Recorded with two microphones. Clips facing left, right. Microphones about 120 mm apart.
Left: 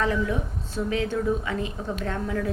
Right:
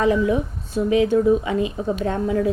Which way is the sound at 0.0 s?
15° right (ahead or behind).